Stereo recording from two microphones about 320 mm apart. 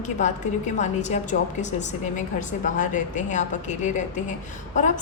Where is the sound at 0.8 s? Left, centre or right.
Left.